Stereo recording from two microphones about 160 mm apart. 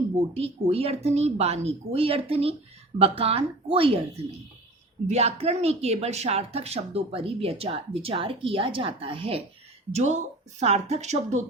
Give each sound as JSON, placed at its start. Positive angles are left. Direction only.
{"t": 0.3, "sound": "speech", "side_deg": -40}
{"t": 9.9, "sound": "speech", "side_deg": -45}